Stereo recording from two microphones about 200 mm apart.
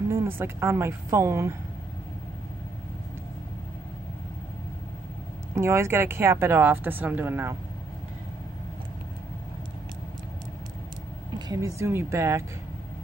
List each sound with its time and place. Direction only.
0.1 s speech: 10° right (ahead or behind)
5.5 s speech: 15° right (ahead or behind)
11.3 s speech: 20° right (ahead or behind)